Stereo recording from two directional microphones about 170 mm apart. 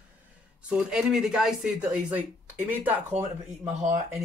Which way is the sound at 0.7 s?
5° right (ahead or behind).